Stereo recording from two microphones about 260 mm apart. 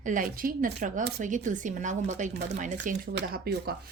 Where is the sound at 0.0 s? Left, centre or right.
Right.